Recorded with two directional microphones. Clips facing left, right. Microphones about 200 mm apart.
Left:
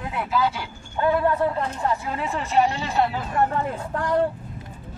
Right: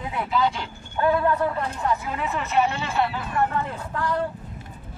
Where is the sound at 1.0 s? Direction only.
20° left (ahead or behind).